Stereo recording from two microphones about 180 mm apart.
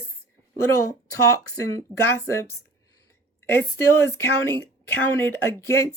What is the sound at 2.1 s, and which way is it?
Speech, 15° left (ahead or behind).